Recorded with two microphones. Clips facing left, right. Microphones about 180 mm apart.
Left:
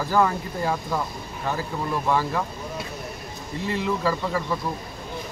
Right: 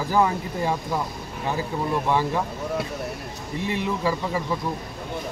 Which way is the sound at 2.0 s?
20° right (ahead or behind).